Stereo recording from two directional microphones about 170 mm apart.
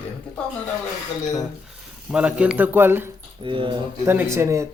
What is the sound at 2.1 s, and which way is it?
Speech, 5° right (ahead or behind).